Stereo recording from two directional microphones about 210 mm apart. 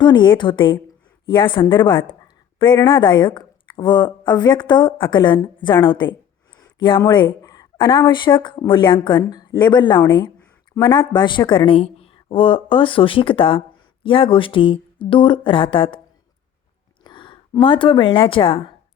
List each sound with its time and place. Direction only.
0.0 s a woman's voice: 20° left (ahead or behind)
17.0 s a woman's voice: 20° left (ahead or behind)